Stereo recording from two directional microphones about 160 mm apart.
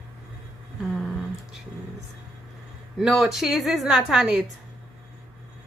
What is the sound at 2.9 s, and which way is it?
A woman's voice, centre (ahead or behind).